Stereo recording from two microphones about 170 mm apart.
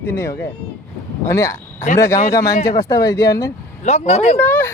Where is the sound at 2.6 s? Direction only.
20° left (ahead or behind).